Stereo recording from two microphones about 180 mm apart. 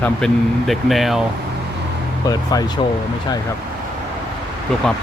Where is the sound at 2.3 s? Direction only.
20° left (ahead or behind).